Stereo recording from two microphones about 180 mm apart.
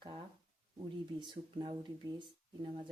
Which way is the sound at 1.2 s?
25° right (ahead or behind).